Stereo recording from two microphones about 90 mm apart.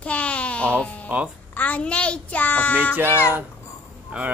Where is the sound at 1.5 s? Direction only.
20° left (ahead or behind).